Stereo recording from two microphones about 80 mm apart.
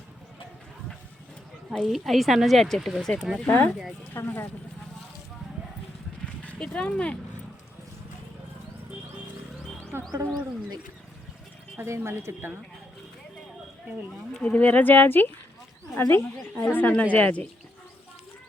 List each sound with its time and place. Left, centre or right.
1.8 s speech: centre
3.4 s speech: left
6.4 s speech: centre
9.9 s music: right
11.8 s speech: right
14.5 s speech: centre